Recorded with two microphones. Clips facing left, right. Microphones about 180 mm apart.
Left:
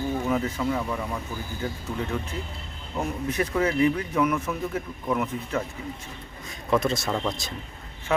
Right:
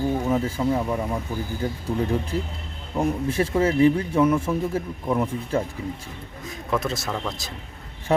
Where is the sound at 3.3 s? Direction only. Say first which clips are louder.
Right 1 dB; 25° right (ahead or behind).